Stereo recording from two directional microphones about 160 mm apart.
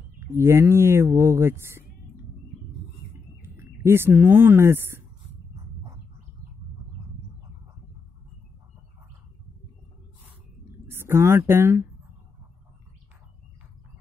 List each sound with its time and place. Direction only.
0.3 s speech: 15° right (ahead or behind)
3.4 s speech: 15° right (ahead or behind)
10.9 s speech: 15° right (ahead or behind)